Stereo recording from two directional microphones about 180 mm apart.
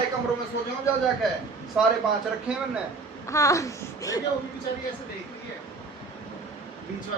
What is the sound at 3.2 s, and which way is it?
Speech, 15° left (ahead or behind).